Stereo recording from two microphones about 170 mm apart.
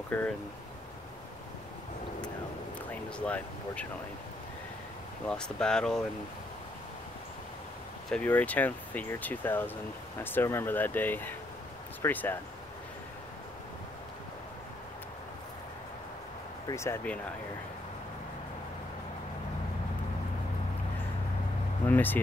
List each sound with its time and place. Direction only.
0.1 s speech: 10° left (ahead or behind)
2.9 s speech: 10° left (ahead or behind)
5.2 s speech: 5° left (ahead or behind)
8.1 s speech: 10° left (ahead or behind)
16.6 s speech: 15° left (ahead or behind)
21.8 s speech: 10° left (ahead or behind)